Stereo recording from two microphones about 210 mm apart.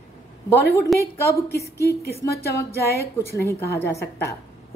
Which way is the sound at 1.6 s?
50° left (ahead or behind).